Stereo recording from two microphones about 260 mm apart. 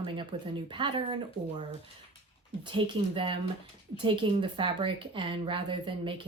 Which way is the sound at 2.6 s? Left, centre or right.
Centre.